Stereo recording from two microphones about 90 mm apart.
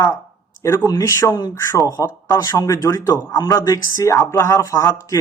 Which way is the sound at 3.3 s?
50° left (ahead or behind).